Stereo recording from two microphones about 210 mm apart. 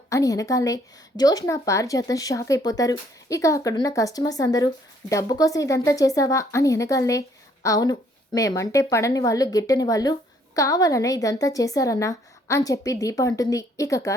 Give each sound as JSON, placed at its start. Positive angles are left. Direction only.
{"t": 0.1, "sound": "a woman's voice", "side_deg": 15}